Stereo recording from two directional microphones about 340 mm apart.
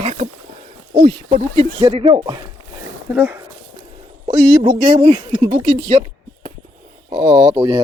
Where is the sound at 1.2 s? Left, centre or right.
Centre.